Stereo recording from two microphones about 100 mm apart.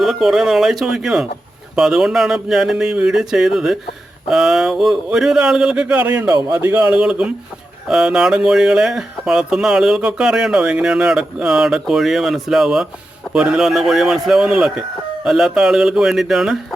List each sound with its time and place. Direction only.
0.0 s speech: 5° right (ahead or behind); by 6.8 s 20° right (ahead or behind)
6.9 s speech: 10° right (ahead or behind)